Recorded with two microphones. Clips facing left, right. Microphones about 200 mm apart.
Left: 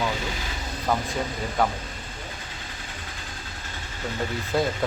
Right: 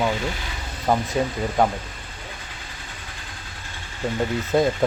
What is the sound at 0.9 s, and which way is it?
Speech, 15° right (ahead or behind).